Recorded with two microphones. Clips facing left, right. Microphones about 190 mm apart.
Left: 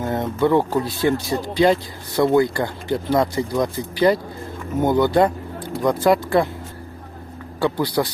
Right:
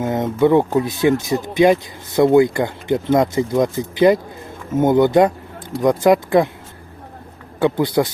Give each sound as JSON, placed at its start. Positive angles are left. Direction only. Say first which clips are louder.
{"t": 0.0, "sound": "speech", "louder": "right 4 dB", "side_deg": -20}
{"t": 7.6, "sound": "speech", "louder": "right 4 dB", "side_deg": -20}